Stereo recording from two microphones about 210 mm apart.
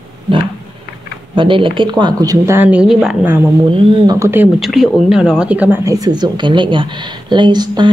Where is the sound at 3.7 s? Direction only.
25° right (ahead or behind).